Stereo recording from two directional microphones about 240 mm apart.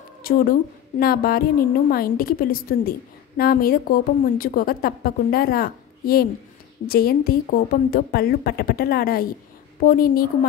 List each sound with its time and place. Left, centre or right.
0.2 s a woman's voice: left